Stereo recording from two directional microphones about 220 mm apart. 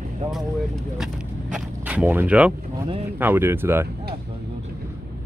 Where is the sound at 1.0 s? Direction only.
5° right (ahead or behind).